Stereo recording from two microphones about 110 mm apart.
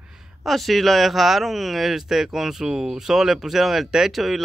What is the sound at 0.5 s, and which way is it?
Speech, centre (ahead or behind).